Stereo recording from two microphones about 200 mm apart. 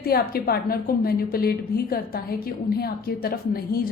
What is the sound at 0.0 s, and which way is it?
A woman's voice, 50° left (ahead or behind).